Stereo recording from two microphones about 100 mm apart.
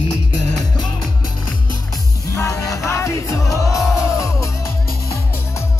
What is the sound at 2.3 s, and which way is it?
Music, 35° left (ahead or behind).